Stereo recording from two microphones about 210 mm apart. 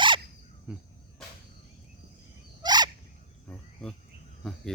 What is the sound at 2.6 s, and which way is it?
Turkey, 20° right (ahead or behind).